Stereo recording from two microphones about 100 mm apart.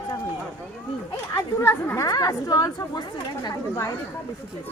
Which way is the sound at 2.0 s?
40° left (ahead or behind).